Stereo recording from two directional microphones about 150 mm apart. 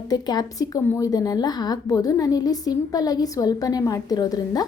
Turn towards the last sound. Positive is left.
turn(degrees=25)  # may be behind; listen again after turning